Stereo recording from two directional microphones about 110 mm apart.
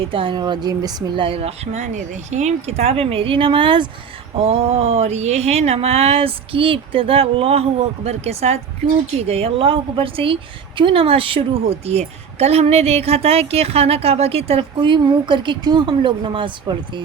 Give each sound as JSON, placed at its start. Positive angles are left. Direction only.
{"t": 0.0, "sound": "a woman's voice", "side_deg": -55}
{"t": 4.4, "sound": "a woman's voice", "side_deg": -65}